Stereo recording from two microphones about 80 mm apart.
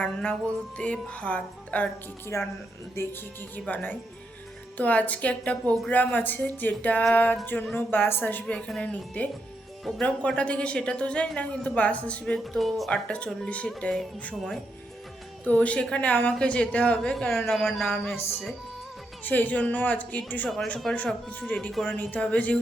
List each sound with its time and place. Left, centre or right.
0.0 s speech: centre
2.2 s a woman's voice: left
12.2 s speech: centre
12.9 s speech: centre
15.4 s speech: centre
19.2 s speech: left
20.9 s speech: centre
21.2 s speech: centre